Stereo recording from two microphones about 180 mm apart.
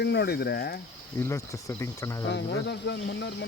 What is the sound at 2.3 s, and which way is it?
Speech, 70° left (ahead or behind).